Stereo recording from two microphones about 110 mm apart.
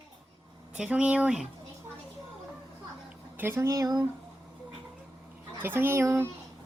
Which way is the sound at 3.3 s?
20° right (ahead or behind).